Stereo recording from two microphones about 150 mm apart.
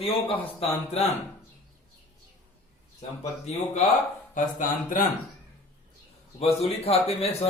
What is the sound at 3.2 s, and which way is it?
Speech, 50° left (ahead or behind).